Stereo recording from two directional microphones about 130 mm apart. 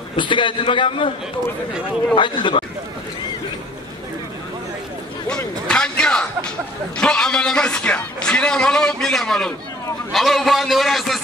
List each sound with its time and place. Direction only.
0.1 s a man's voice: 40° left (ahead or behind)
2.1 s a man's voice: 35° left (ahead or behind)
5.7 s a man's voice: 5° left (ahead or behind)